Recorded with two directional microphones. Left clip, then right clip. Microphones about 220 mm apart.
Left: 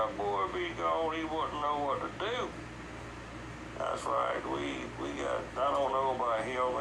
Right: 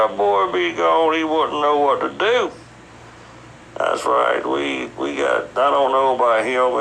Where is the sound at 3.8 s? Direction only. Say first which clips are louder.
Right 15 dB; 50° right (ahead or behind).